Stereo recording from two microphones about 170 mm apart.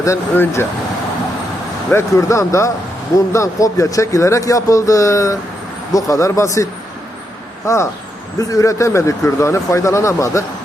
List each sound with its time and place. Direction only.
0.0 s speech: 15° left (ahead or behind)
1.9 s a man's voice: 15° left (ahead or behind)